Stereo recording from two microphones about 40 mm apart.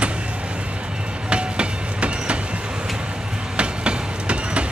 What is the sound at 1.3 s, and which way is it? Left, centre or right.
Train, right.